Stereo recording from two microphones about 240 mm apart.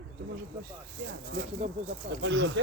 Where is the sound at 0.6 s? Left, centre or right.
Right.